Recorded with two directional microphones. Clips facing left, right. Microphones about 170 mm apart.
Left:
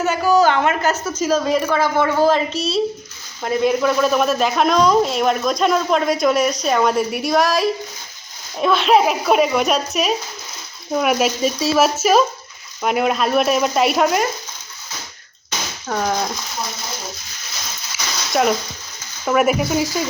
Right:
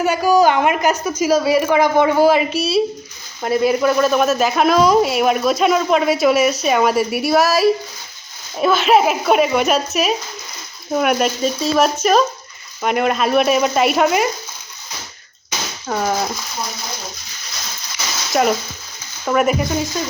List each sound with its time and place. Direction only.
0.0 s a woman's voice: 10° right (ahead or behind)
15.4 s breaking: 5° right (ahead or behind)
18.3 s speech: centre (ahead or behind)